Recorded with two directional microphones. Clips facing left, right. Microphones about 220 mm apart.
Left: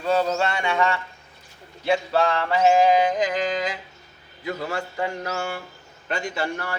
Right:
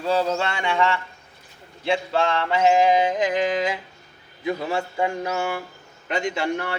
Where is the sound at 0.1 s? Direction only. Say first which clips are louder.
Left 1 dB; 30° right (ahead or behind).